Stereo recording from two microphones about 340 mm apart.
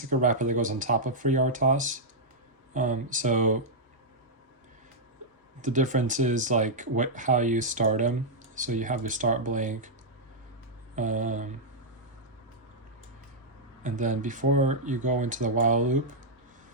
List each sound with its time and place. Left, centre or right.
0.1 s speech: right
5.6 s speech: right
10.9 s speech: right
13.8 s speech: right